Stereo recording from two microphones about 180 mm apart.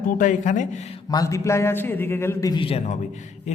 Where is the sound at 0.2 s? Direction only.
45° left (ahead or behind).